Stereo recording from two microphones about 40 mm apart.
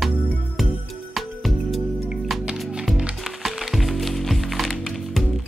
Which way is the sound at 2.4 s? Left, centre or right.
Right.